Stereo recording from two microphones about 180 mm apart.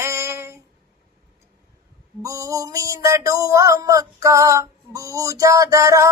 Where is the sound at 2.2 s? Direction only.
15° right (ahead or behind).